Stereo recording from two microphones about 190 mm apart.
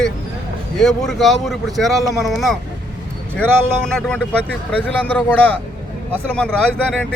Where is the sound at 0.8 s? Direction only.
Centre (ahead or behind).